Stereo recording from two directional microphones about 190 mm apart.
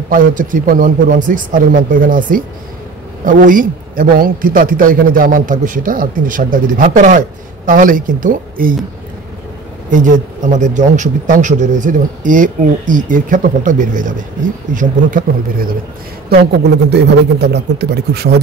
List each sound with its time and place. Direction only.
0.1 s a man's voice: 45° right (ahead or behind)
9.8 s a man's voice: 45° right (ahead or behind)
16.9 s speech: 60° right (ahead or behind)